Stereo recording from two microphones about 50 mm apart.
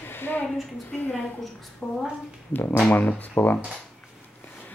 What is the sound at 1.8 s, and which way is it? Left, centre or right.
Speech, left.